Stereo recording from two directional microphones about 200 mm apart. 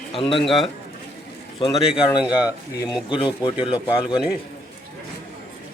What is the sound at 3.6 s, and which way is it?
Speech, 5° right (ahead or behind).